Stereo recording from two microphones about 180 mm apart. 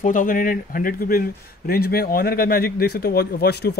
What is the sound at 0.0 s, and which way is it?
Speech, 45° left (ahead or behind).